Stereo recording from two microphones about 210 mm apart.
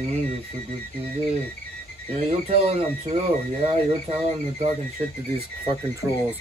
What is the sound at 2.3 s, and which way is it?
Speech, 30° right (ahead or behind).